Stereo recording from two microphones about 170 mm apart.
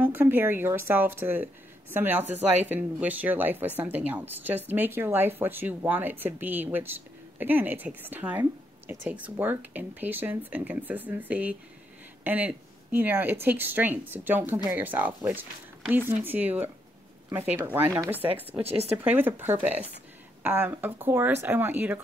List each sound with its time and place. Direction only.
0.0 s speech: 10° right (ahead or behind)
18.6 s speech: 35° right (ahead or behind)
19.0 s speech: 10° right (ahead or behind)